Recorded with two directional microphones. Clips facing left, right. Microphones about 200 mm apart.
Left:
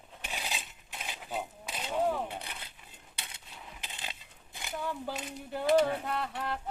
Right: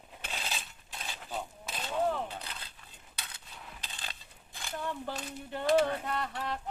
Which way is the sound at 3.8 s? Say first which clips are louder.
Left 3 dB; 20° left (ahead or behind).